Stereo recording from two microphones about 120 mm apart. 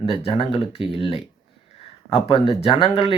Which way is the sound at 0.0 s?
50° left (ahead or behind).